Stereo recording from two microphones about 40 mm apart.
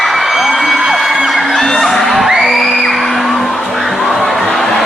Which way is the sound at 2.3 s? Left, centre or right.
Centre.